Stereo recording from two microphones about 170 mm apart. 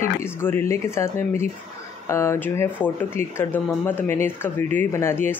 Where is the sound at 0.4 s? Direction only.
15° left (ahead or behind).